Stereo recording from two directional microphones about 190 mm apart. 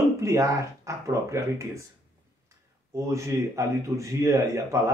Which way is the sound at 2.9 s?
15° right (ahead or behind).